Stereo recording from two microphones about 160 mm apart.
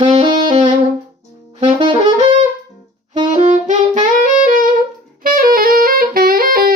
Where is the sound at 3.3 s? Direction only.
50° right (ahead or behind).